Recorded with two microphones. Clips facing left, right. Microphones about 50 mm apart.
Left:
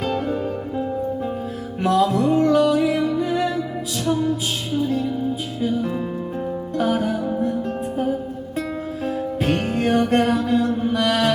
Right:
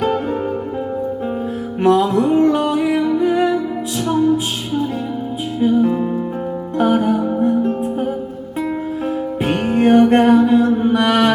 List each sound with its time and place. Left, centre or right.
0.0 s music: right
1.8 s music: right
5.5 s music: centre